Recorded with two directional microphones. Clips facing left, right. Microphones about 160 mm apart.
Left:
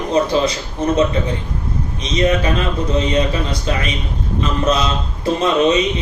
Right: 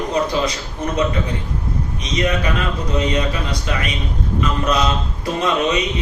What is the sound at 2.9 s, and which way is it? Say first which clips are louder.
Speech: left 2 dB; 25° left (ahead or behind).